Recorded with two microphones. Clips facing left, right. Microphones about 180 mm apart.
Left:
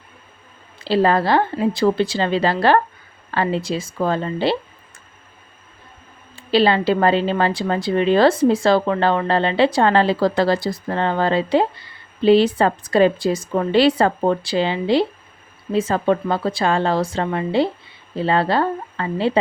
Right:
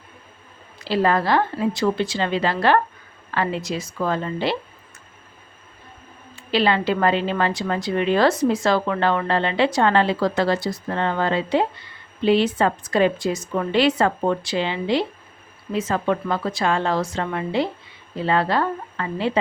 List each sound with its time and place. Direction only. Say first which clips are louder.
0.8 s a woman's voice: left 3 dB; 30° left (ahead or behind)
6.3 s a woman's voice: left 4 dB; 30° left (ahead or behind)